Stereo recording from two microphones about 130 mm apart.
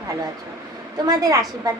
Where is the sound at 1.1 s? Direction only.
30° right (ahead or behind).